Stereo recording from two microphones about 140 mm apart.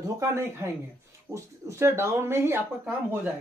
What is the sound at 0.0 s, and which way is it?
A man's voice, 25° right (ahead or behind).